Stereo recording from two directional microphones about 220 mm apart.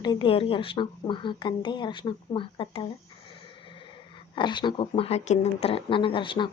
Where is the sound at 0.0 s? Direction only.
20° left (ahead or behind).